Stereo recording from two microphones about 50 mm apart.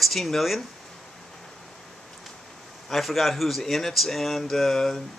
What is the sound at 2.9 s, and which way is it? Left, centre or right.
A man's voice, centre.